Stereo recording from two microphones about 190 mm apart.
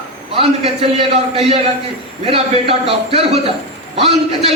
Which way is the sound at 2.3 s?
30° right (ahead or behind).